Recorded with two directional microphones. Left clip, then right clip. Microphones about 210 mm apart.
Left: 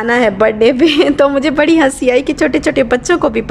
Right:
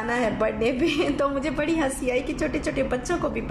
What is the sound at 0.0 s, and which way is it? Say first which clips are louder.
A woman's voice: left 13 dB; 45° left (ahead or behind).